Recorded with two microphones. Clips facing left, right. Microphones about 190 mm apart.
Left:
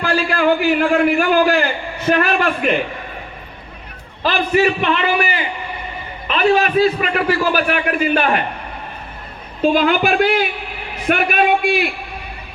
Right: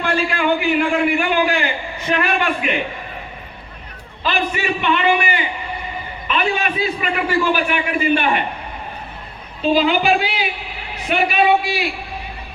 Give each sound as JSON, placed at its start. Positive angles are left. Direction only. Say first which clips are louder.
{"t": 0.0, "sound": "a sound", "louder": "left 3 dB", "side_deg": 40}
{"t": 0.8, "sound": "a man's voice", "louder": "left 3 dB", "side_deg": 40}
{"t": 4.2, "sound": "a man's voice", "louder": "left 6 dB", "side_deg": 40}
{"t": 9.6, "sound": "a woman's voice", "louder": "left 2 dB", "side_deg": 50}